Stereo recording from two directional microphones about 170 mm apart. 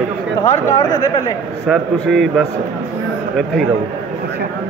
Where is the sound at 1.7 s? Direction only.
Centre (ahead or behind).